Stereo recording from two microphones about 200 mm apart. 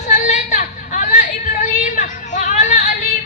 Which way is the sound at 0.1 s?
35° left (ahead or behind).